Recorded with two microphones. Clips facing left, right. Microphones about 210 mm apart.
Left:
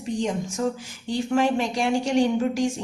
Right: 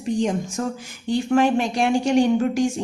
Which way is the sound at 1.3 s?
60° right (ahead or behind).